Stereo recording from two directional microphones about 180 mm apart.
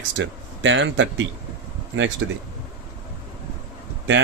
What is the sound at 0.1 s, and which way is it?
Speech, 90° right.